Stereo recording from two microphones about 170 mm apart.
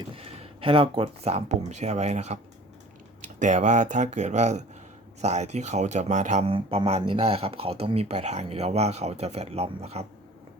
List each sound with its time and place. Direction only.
0.2 s speech: 35° right (ahead or behind)
3.4 s speech: 45° right (ahead or behind)